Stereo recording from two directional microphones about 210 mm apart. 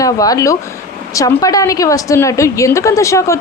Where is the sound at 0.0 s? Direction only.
15° left (ahead or behind).